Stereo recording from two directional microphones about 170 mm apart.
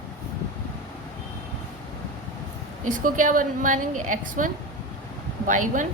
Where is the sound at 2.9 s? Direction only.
50° right (ahead or behind).